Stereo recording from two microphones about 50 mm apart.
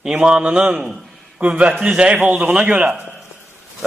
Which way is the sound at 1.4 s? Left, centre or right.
Right.